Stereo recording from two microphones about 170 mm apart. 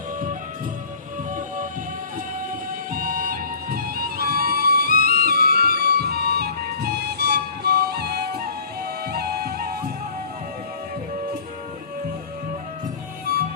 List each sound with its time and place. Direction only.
2.9 s music: 55° right (ahead or behind)